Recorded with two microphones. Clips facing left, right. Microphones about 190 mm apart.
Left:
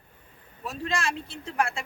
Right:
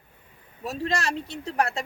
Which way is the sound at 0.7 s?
40° right (ahead or behind).